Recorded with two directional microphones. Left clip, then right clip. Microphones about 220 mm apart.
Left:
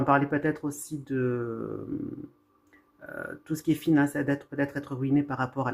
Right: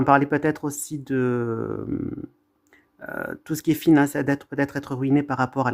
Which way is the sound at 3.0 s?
50° right (ahead or behind).